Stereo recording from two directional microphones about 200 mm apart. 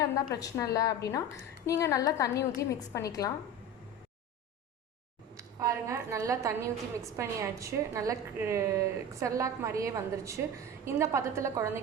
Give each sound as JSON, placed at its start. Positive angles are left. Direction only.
{"t": 0.2, "sound": "a woman's voice", "side_deg": 20}
{"t": 5.4, "sound": "a woman's voice", "side_deg": -15}